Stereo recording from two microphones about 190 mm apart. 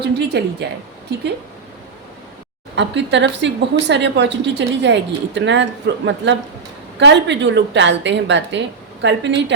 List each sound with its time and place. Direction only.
0.0 s speech: 60° right (ahead or behind)
2.7 s speech: 70° right (ahead or behind)
7.0 s speech: 65° right (ahead or behind)